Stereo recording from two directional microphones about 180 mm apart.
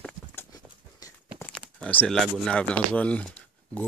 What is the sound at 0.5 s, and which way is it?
Clip-clop, 20° left (ahead or behind).